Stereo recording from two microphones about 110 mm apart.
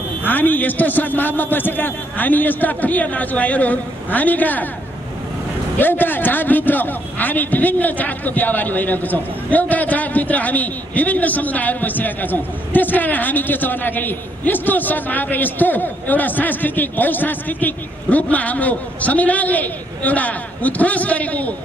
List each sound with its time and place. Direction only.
0.2 s a man's voice: 15° left (ahead or behind)
5.8 s a man's voice: 15° left (ahead or behind)